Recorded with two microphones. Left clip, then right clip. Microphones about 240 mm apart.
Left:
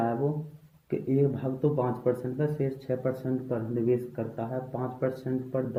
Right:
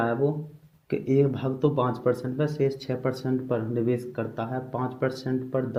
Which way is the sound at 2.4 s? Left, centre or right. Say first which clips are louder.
Right 4 dB; right.